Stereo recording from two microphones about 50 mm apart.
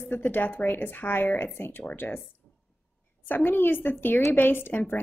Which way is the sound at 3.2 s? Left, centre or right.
Left.